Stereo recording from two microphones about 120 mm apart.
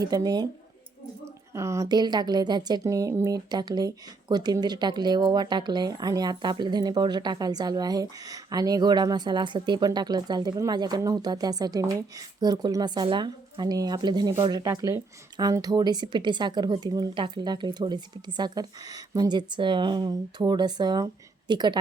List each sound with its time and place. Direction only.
0.0 s a woman's voice: 30° right (ahead or behind)